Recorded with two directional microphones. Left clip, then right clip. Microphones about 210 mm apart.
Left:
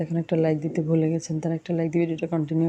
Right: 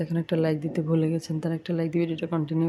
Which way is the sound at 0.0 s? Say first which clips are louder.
Left 2 dB; centre (ahead or behind).